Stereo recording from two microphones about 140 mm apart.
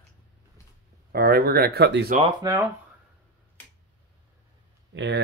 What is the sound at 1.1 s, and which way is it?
Speech, 90° right.